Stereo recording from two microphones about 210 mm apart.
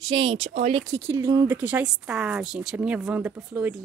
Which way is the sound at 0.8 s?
15° right (ahead or behind).